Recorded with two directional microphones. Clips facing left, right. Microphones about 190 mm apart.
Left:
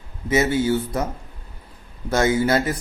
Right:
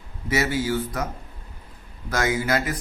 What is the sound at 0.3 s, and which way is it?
Speech, 20° left (ahead or behind).